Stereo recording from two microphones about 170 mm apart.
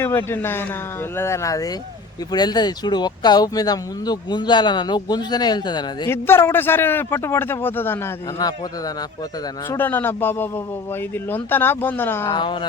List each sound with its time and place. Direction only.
0.0 s speech: 15° left (ahead or behind)
6.1 s speech: 15° left (ahead or behind)
9.6 s speech: 10° left (ahead or behind)
12.3 s speech: 25° left (ahead or behind)